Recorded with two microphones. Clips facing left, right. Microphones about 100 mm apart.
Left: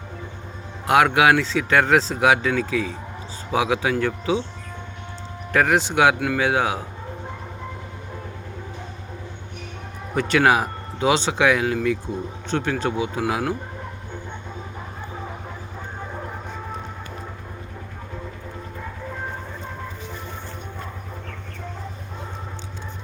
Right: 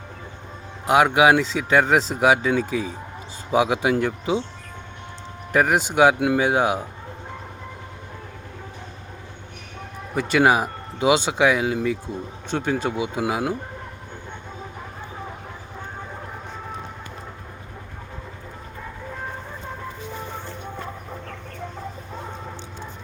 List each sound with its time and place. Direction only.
0.9 s speech: 15° right (ahead or behind)
5.5 s speech: 10° right (ahead or behind)
6.1 s speech: 20° right (ahead or behind)
10.2 s speech: 5° right (ahead or behind)